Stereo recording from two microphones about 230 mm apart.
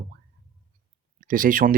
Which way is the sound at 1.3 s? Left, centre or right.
Right.